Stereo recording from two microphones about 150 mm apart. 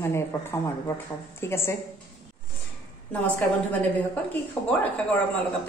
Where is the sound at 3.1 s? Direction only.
10° left (ahead or behind).